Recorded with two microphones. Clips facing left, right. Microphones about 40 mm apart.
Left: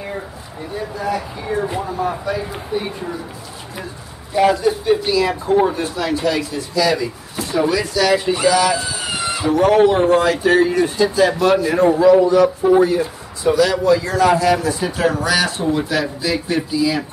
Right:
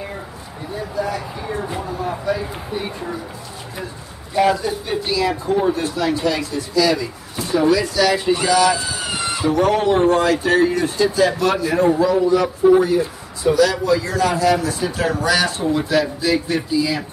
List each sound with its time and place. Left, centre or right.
0.9 s speech: centre
4.4 s speech: centre